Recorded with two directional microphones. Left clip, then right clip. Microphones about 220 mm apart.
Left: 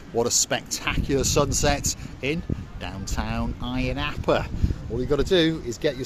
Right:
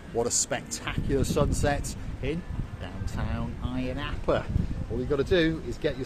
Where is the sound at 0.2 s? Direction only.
40° left (ahead or behind).